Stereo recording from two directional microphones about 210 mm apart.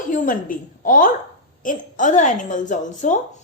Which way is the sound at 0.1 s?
40° left (ahead or behind).